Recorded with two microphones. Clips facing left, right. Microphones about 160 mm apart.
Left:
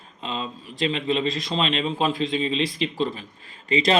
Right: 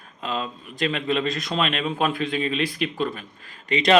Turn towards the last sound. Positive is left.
turn(degrees=30)  # may be behind; listen again after turning